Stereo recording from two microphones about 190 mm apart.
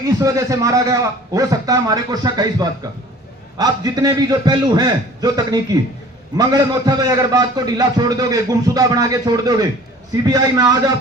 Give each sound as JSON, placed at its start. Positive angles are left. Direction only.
{"t": 0.2, "sound": "a man's voice", "side_deg": -15}